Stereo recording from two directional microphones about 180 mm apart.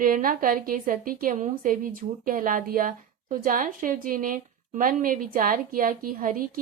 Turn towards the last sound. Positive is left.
turn(degrees=-50)  # may be behind; listen again after turning